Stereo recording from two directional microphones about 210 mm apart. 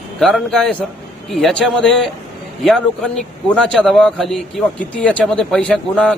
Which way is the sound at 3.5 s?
5° left (ahead or behind).